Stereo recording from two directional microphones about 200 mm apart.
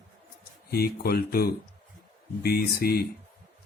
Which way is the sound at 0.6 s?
50° left (ahead or behind).